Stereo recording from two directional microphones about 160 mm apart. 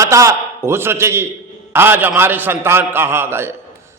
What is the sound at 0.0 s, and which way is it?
A man's voice, 20° right (ahead or behind).